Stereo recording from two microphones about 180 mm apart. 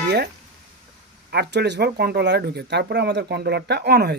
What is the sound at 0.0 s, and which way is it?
Music, 60° right (ahead or behind).